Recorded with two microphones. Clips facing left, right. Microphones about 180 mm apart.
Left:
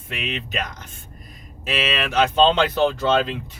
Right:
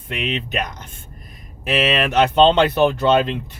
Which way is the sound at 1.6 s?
60° right (ahead or behind).